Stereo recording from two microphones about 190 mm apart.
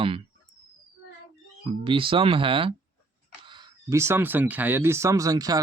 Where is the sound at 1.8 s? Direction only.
25° right (ahead or behind).